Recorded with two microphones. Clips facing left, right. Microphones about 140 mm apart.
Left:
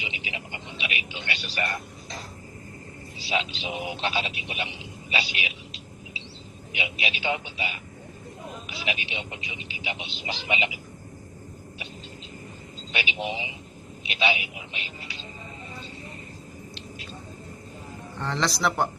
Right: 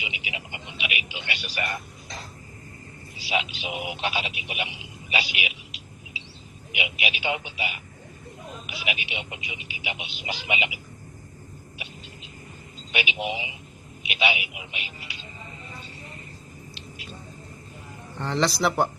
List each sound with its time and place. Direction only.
0.0 s a sound: 15° right (ahead or behind)
0.3 s speech: 15° right (ahead or behind)
3.2 s speech: 15° right (ahead or behind)
5.1 s a sound: 15° right (ahead or behind)
7.0 s speech: 15° right (ahead or behind)
8.6 s speech: 15° right (ahead or behind)
12.9 s speech: 15° right (ahead or behind)
18.2 s speech: 5° right (ahead or behind)